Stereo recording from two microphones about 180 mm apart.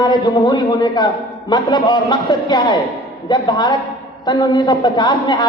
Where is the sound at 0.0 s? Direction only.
25° left (ahead or behind).